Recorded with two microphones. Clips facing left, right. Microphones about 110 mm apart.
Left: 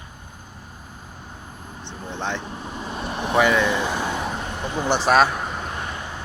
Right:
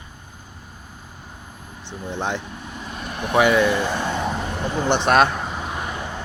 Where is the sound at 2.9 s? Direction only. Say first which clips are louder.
Left 2 dB; 30° left (ahead or behind).